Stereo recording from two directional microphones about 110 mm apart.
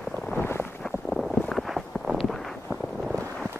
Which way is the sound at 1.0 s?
Centre (ahead or behind).